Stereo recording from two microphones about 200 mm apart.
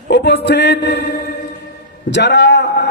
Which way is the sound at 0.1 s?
55° left (ahead or behind).